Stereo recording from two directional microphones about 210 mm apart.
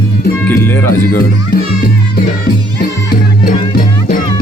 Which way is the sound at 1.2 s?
45° left (ahead or behind).